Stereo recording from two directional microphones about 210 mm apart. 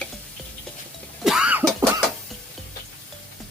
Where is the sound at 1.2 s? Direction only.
5° right (ahead or behind).